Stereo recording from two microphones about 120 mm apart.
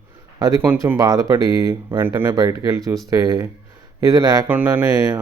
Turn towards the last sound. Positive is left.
turn(degrees=-30)  # may be behind; listen again after turning